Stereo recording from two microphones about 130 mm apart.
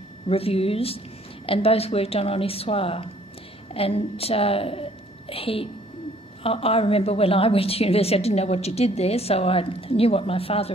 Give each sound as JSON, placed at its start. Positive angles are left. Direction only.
{"t": 0.3, "sound": "a woman's voice", "side_deg": 50}